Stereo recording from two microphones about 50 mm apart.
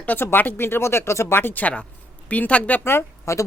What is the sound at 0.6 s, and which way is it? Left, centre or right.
Speech, left.